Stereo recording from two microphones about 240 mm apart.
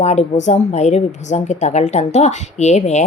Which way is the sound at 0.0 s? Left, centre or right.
Left.